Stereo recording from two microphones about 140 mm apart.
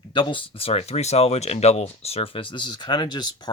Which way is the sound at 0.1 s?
35° left (ahead or behind).